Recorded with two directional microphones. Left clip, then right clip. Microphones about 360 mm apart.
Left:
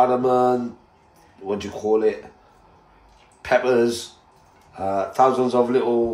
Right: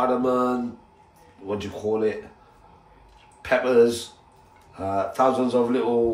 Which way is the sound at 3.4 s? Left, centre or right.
Centre.